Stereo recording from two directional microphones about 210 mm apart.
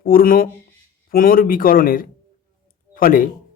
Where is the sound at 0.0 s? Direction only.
45° left (ahead or behind).